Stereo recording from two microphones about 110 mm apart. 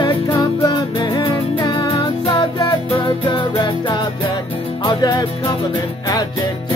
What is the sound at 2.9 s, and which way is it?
Music, 55° left (ahead or behind).